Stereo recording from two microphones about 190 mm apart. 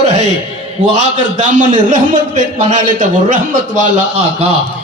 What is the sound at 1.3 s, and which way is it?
A man's voice, 40° right (ahead or behind).